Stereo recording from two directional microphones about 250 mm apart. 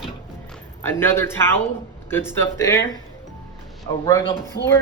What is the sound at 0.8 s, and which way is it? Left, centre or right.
Speech, centre.